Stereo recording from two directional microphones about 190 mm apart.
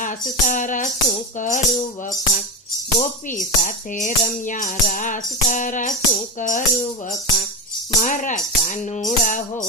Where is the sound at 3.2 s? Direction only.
45° left (ahead or behind).